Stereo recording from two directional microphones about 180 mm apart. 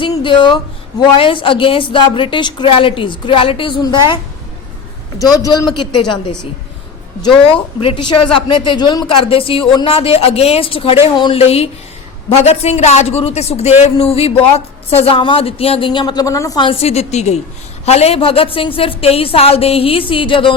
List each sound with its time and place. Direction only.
0.0 s a woman's voice: 25° left (ahead or behind)
5.7 s a woman's voice: 25° left (ahead or behind)
7.8 s a woman's voice: 30° left (ahead or behind)